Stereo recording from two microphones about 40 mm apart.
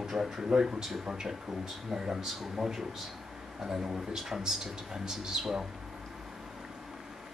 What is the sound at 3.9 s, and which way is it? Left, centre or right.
Speech, centre.